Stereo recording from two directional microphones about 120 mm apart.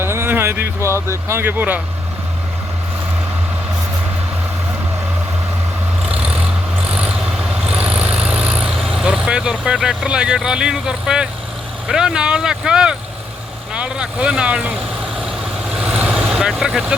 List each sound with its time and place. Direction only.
0.0 s a sound: 20° right (ahead or behind)
1.3 s speech: 20° right (ahead or behind)
6.9 s vehicle: 10° right (ahead or behind)
7.9 s speech: 10° right (ahead or behind)
15.8 s vehicle: 10° right (ahead or behind)